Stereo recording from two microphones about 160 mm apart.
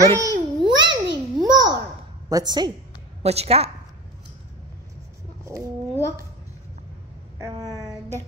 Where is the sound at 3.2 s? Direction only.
40° right (ahead or behind).